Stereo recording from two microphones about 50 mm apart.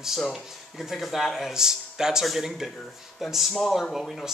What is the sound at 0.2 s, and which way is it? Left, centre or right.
Speech, centre.